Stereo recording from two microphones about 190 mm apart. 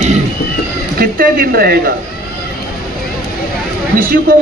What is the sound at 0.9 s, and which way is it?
Speech, 50° right (ahead or behind).